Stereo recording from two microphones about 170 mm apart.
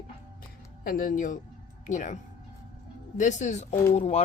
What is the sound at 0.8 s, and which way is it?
Speech, 55° left (ahead or behind).